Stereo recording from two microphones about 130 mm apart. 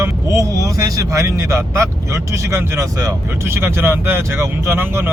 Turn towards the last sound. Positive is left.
turn(degrees=-15)  # may be behind; listen again after turning